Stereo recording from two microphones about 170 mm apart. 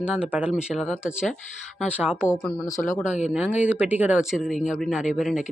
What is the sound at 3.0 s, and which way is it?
Speech, 45° left (ahead or behind).